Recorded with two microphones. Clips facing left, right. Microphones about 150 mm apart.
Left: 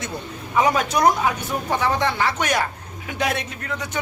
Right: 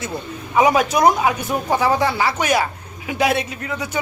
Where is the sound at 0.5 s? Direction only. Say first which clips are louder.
Right 4 dB; 10° right (ahead or behind).